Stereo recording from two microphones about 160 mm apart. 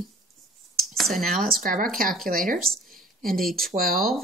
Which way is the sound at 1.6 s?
60° right (ahead or behind).